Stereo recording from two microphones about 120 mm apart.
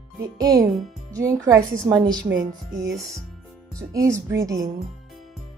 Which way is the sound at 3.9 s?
25° right (ahead or behind).